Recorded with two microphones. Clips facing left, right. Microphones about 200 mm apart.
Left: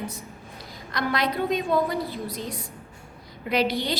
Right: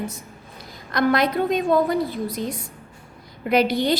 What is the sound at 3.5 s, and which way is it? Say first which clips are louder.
Speech: right 5 dB; 50° right (ahead or behind).